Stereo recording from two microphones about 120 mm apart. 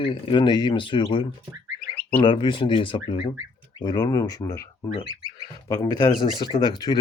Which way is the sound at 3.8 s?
40° left (ahead or behind).